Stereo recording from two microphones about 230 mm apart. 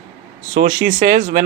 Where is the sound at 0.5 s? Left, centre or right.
Right.